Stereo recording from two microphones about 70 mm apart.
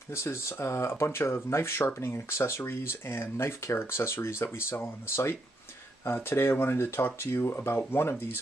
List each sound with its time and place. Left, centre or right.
0.1 s speech: left